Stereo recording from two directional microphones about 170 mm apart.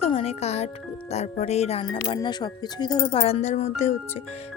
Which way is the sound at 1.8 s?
25° left (ahead or behind).